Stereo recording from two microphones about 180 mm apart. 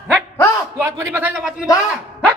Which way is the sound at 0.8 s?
15° right (ahead or behind).